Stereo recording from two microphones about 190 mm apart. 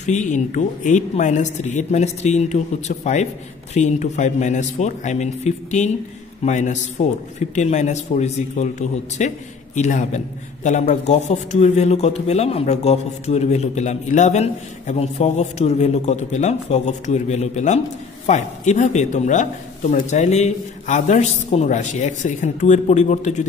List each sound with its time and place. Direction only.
0.0 s a man's voice: 40° left (ahead or behind)